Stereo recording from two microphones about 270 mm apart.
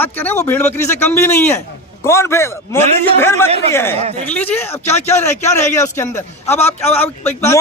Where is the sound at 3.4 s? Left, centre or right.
Right.